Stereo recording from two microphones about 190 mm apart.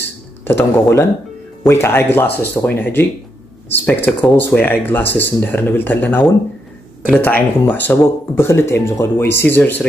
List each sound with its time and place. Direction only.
0.5 s speech: 10° left (ahead or behind)
9.2 s speech: 60° left (ahead or behind)
9.5 s speech: 10° left (ahead or behind)